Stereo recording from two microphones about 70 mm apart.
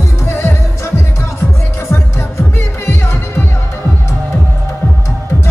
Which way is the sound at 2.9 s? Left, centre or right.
Left.